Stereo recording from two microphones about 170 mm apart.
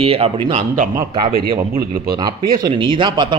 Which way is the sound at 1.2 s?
60° right (ahead or behind).